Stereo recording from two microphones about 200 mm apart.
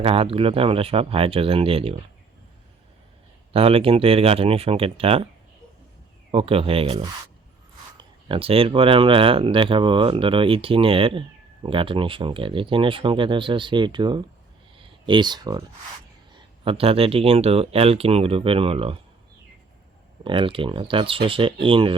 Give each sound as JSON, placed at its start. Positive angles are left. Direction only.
{"t": 0.0, "sound": "speech", "side_deg": -30}
{"t": 3.5, "sound": "speech", "side_deg": -30}
{"t": 6.3, "sound": "speech", "side_deg": -25}
{"t": 16.6, "sound": "speech", "side_deg": -30}
{"t": 20.2, "sound": "speech", "side_deg": -25}